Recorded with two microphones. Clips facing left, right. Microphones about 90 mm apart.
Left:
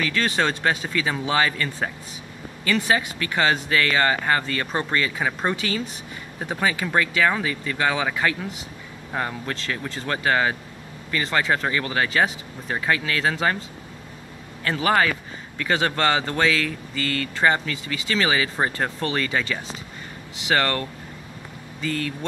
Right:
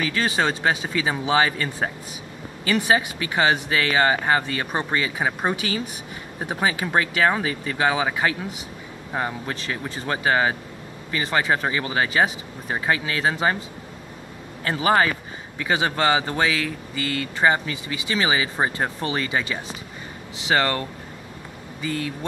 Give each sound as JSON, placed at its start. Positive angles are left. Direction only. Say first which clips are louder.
{"t": 0.0, "sound": "speech", "louder": "even", "side_deg": -15}
{"t": 14.6, "sound": "speech", "louder": "right 1 dB", "side_deg": -20}
{"t": 21.8, "sound": "speech", "louder": "even", "side_deg": -15}